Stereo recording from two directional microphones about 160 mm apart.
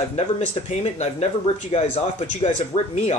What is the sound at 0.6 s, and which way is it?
Speech, 45° left (ahead or behind).